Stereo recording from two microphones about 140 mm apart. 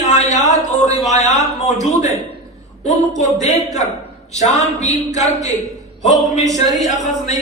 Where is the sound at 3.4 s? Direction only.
60° left (ahead or behind).